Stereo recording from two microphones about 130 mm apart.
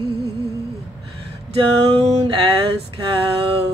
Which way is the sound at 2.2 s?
40° right (ahead or behind).